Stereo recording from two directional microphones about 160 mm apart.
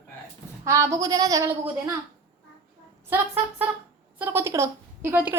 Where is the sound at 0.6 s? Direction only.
15° right (ahead or behind).